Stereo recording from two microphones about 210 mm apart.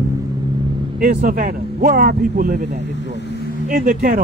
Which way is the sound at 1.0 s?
40° right (ahead or behind).